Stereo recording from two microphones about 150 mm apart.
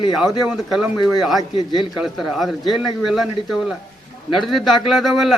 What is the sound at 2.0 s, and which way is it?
A man's voice, centre (ahead or behind).